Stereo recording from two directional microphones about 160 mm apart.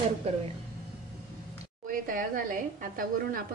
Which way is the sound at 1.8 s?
60° right (ahead or behind).